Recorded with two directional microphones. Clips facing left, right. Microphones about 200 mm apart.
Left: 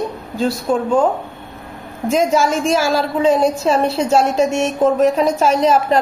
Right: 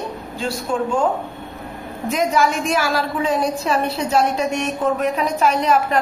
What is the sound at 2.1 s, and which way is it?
A woman's voice, 25° left (ahead or behind).